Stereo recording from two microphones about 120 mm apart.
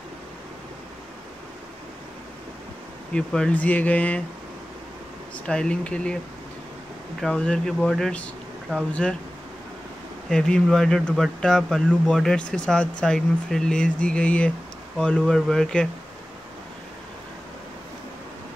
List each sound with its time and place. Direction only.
3.1 s speech: 10° left (ahead or behind)
5.5 s speech: 10° left (ahead or behind)
7.2 s speech: 5° left (ahead or behind)
10.3 s speech: 5° left (ahead or behind)